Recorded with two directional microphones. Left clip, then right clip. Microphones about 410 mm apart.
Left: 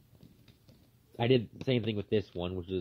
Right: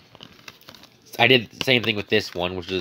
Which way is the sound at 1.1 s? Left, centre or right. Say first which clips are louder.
Right 12 dB; centre.